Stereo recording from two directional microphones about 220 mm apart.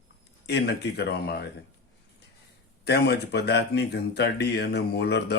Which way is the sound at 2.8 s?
50° left (ahead or behind).